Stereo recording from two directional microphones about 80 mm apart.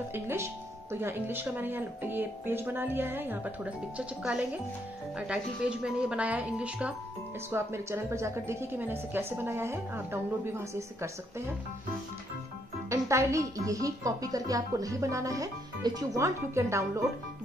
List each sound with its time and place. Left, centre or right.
0.1 s speech: right
4.2 s a woman's voice: centre
7.5 s speech: right
12.9 s speech: right
16.2 s speech: right